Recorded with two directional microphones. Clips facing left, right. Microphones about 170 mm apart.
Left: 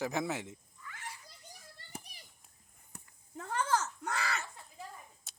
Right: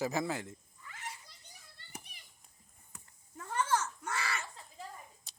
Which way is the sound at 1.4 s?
40° left (ahead or behind).